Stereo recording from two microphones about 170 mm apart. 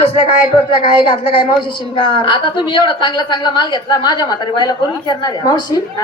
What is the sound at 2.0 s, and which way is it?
A woman's voice, 30° left (ahead or behind).